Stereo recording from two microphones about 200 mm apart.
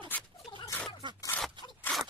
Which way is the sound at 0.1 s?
10° left (ahead or behind).